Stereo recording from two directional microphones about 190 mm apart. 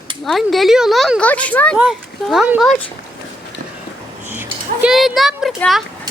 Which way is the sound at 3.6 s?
45° right (ahead or behind).